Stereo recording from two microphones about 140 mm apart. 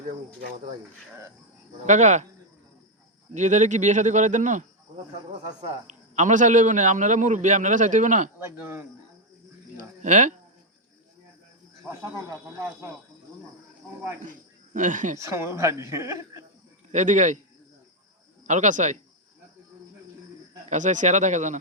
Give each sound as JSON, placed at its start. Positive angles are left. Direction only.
{"t": 1.9, "sound": "a man's voice", "side_deg": -55}
{"t": 3.3, "sound": "a man's voice", "side_deg": -60}
{"t": 8.6, "sound": "speech", "side_deg": -15}
{"t": 10.0, "sound": "a man's voice", "side_deg": -60}
{"t": 11.9, "sound": "a woman's voice", "side_deg": -20}
{"t": 14.7, "sound": "a man's voice", "side_deg": -65}
{"t": 15.2, "sound": "a woman's voice", "side_deg": -20}
{"t": 16.9, "sound": "a man's voice", "side_deg": -60}
{"t": 18.4, "sound": "a man's voice", "side_deg": -60}
{"t": 20.7, "sound": "a man's voice", "side_deg": -60}